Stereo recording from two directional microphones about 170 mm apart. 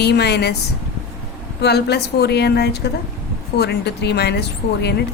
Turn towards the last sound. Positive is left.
turn(degrees=75)  # may be behind; listen again after turning